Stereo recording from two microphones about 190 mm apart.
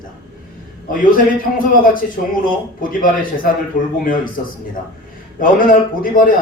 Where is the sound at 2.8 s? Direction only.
45° left (ahead or behind).